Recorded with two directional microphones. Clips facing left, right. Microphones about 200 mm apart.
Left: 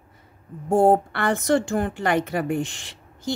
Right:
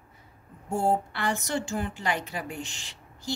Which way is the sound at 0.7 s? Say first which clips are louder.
Left 9 dB; 60° left (ahead or behind).